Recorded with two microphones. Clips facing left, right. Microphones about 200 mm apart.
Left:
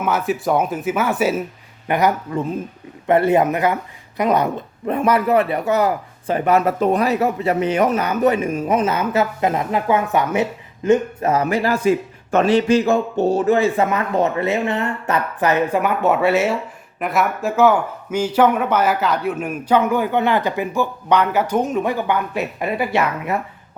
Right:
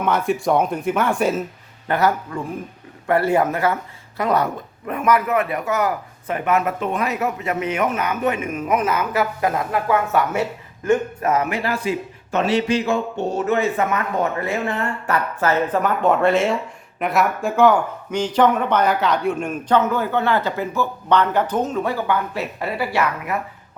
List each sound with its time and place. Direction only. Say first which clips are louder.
0.0 s speech: even; 5° left (ahead or behind)
1.9 s a man's voice: left 2 dB; 15° left (ahead or behind)
11.3 s a man's voice: left 3 dB; 35° left (ahead or behind)